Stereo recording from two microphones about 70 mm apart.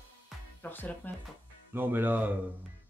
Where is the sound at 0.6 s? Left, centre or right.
Left.